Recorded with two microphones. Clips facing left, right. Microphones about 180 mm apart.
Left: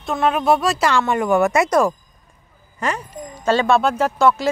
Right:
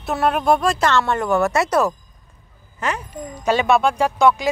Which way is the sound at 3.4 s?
15° right (ahead or behind).